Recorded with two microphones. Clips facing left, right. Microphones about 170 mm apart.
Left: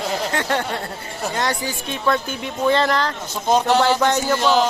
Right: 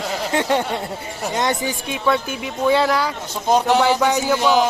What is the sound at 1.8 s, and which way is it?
Speech, 10° right (ahead or behind).